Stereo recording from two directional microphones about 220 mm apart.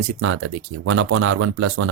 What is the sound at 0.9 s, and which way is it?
Speech, 65° right (ahead or behind).